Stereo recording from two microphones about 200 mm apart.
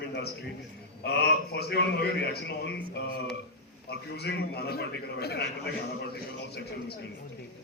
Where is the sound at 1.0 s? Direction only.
55° left (ahead or behind).